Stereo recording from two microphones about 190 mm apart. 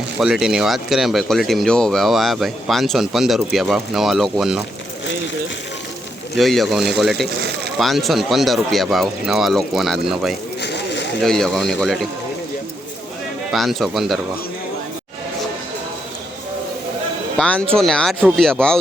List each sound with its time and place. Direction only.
0.2 s speech: 5° right (ahead or behind)
6.3 s speech: centre (ahead or behind)
10.6 s a sound: 65° left (ahead or behind)
11.2 s speech: 5° left (ahead or behind)
13.5 s speech: centre (ahead or behind)
17.3 s speech: 5° left (ahead or behind)